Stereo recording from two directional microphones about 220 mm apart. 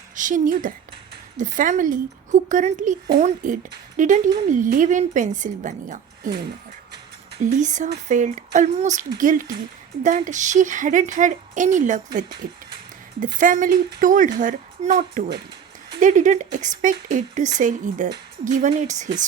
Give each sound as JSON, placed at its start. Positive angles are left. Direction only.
{"t": 0.2, "sound": "a woman's voice", "side_deg": -35}
{"t": 7.5, "sound": "a woman's voice", "side_deg": -35}